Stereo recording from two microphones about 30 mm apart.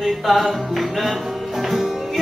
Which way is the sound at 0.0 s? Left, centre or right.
Centre.